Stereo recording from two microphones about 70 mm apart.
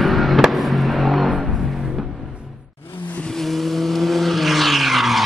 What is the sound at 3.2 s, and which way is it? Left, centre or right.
Vehicle, centre.